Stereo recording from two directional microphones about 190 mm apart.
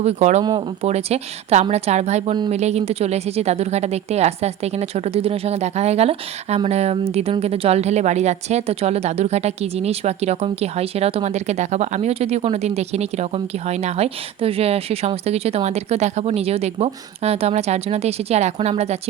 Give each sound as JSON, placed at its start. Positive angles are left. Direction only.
{"t": 0.0, "sound": "a woman's voice", "side_deg": -35}